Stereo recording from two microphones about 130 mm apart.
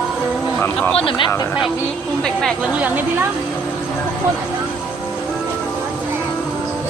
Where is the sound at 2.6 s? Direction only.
10° right (ahead or behind).